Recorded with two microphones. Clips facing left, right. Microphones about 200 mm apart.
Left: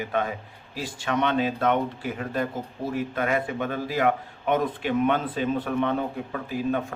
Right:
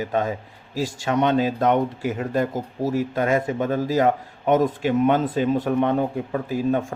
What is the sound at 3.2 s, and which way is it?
A man's voice, 40° right (ahead or behind).